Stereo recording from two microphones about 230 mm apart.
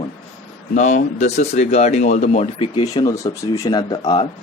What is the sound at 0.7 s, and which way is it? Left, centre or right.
Speech, left.